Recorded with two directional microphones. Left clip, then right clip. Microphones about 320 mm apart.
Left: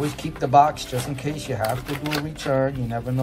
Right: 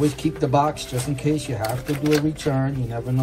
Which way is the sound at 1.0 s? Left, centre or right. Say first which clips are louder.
Right 5 dB; centre.